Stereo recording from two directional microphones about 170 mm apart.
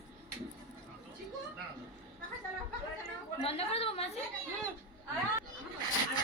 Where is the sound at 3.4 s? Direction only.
35° left (ahead or behind).